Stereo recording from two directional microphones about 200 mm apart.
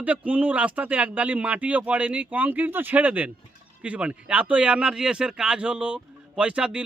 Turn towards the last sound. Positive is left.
turn(degrees=-5)  # may be behind; listen again after turning